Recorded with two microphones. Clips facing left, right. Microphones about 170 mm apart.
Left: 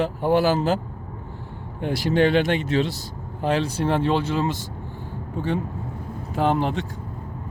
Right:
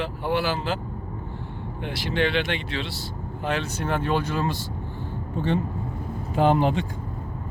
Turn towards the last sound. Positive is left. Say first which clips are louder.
# right 2 dB
turn(degrees=0)  # may be behind; listen again after turning